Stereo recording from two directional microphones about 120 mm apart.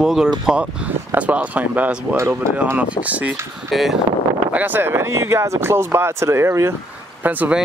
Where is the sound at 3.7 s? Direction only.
Centre (ahead or behind).